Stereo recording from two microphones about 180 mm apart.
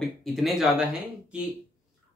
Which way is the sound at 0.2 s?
Centre (ahead or behind).